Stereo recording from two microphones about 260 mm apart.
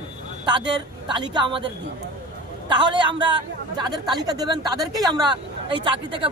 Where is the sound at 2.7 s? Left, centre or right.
Centre.